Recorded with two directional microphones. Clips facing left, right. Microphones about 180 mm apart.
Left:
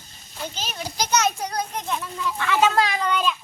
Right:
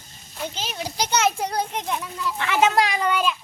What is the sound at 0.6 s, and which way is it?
A child's voice, 25° right (ahead or behind).